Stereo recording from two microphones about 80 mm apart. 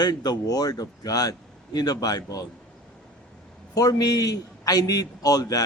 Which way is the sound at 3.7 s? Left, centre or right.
Left.